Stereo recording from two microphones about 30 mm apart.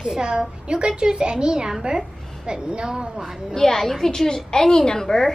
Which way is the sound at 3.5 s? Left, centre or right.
Centre.